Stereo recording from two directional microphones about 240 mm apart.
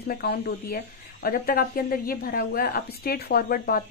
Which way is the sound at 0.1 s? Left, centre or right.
Left.